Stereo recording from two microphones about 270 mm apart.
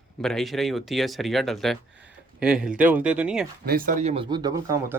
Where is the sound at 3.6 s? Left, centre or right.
Right; by 5.0 s centre.